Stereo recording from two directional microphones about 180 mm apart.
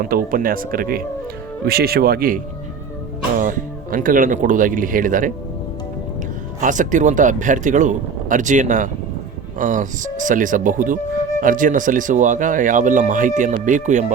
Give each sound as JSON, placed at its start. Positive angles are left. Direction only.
{"t": 0.0, "sound": "speech", "side_deg": -50}
{"t": 6.6, "sound": "speech", "side_deg": -45}